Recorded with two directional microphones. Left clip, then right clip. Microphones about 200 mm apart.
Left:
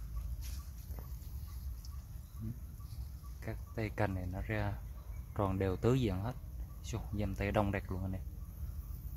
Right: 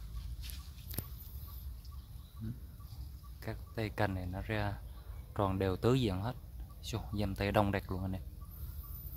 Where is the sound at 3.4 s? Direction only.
5° right (ahead or behind).